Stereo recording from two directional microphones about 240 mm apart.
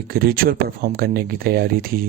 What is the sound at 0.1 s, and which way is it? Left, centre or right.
Speech, right.